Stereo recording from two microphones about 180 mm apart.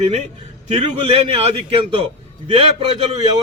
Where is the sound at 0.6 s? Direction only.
35° right (ahead or behind).